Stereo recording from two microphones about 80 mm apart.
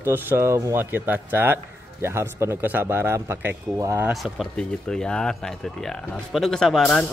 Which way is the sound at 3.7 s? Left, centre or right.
Right.